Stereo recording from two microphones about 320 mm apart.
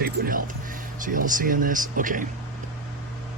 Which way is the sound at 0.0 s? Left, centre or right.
Right.